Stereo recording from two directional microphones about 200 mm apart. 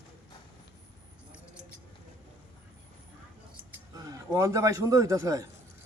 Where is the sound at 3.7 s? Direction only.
15° right (ahead or behind).